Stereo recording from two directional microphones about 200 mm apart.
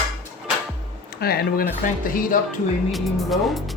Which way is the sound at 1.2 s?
50° left (ahead or behind).